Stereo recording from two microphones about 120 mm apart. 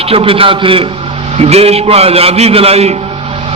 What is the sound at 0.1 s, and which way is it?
Speech, 50° right (ahead or behind).